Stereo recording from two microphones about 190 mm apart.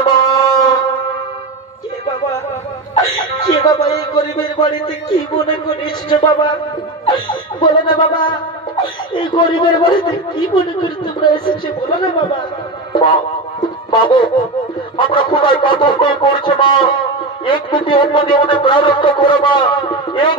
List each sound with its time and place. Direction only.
0.0 s a sound: 20° left (ahead or behind)
3.6 s a man's voice: 20° left (ahead or behind)
6.0 s a man's voice: 25° left (ahead or behind)
13.8 s music: 25° left (ahead or behind)
15.0 s a man's voice: 25° left (ahead or behind)